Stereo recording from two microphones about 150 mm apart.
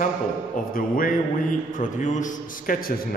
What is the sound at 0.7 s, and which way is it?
Speech, 70° left (ahead or behind).